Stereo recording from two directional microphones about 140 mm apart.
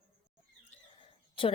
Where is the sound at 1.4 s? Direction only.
40° left (ahead or behind).